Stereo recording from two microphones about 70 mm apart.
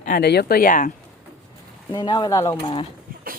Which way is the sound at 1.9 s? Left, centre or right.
Left.